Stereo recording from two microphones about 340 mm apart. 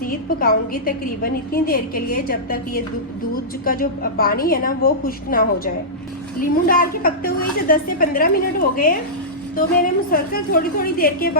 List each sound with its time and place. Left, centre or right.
0.0 s a woman's voice: left